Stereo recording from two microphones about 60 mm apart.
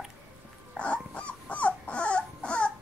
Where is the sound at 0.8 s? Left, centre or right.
Left.